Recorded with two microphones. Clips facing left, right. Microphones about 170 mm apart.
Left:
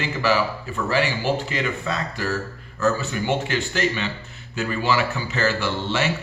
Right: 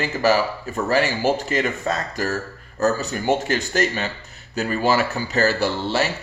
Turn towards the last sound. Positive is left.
turn(degrees=-40)  # may be behind; listen again after turning